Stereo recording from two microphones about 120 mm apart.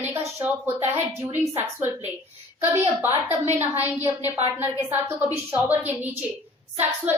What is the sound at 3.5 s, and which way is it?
Speech, 15° right (ahead or behind).